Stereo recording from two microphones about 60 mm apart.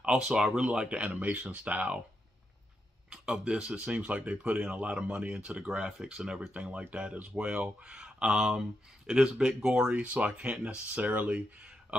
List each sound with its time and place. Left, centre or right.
0.0 s speech: centre
3.1 s speech: centre
6.5 s speech: right
9.9 s speech: right
11.9 s a sound: centre